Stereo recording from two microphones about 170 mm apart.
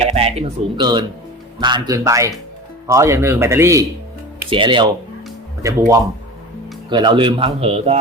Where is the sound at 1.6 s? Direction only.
25° right (ahead or behind).